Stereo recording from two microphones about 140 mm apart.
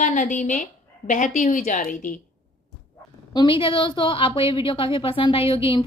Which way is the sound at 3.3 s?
35° left (ahead or behind).